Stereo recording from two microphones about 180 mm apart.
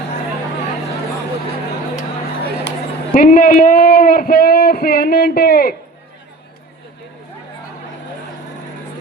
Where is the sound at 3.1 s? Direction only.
50° left (ahead or behind).